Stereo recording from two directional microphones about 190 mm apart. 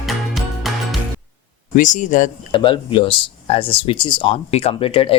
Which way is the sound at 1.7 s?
40° left (ahead or behind).